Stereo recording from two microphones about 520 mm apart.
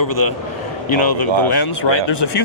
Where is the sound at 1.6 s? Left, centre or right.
Left.